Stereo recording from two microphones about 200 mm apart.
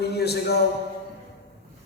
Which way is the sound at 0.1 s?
55° left (ahead or behind).